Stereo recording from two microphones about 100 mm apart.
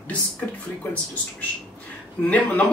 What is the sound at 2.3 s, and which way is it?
Speech, 15° left (ahead or behind).